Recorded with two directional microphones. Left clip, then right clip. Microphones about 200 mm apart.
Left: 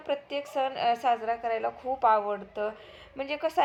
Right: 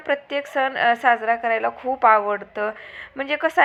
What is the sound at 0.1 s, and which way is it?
A woman's voice, 15° right (ahead or behind).